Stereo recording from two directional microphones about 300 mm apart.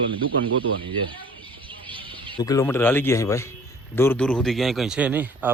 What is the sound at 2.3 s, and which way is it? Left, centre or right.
A man's voice, centre.